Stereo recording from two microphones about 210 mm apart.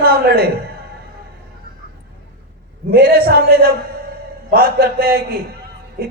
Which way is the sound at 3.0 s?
45° right (ahead or behind).